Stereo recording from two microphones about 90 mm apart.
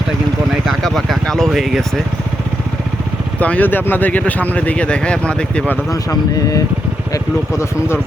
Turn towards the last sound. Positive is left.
turn(degrees=40)  # may be behind; listen again after turning